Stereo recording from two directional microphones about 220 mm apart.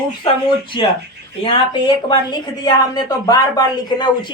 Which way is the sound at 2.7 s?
15° left (ahead or behind).